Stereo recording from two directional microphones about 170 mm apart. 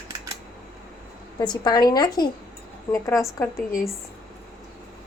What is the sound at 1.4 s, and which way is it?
Speech, 25° left (ahead or behind).